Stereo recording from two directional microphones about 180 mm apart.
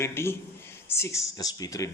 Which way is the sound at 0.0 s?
15° left (ahead or behind).